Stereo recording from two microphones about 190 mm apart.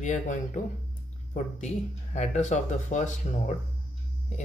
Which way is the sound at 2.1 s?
40° left (ahead or behind).